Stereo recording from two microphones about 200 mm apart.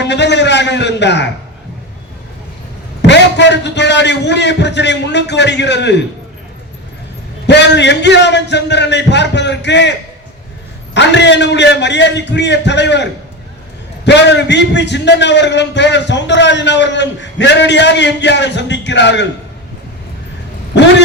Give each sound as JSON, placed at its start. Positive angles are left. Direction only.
{"t": 0.0, "sound": "a man's voice", "side_deg": 60}
{"t": 3.0, "sound": "a man's voice", "side_deg": 60}
{"t": 7.4, "sound": "a man's voice", "side_deg": 60}
{"t": 10.9, "sound": "a man's voice", "side_deg": 60}